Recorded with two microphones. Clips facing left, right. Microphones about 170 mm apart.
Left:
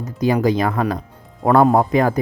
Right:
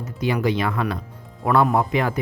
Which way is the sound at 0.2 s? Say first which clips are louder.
Left 5 dB; 40° left (ahead or behind).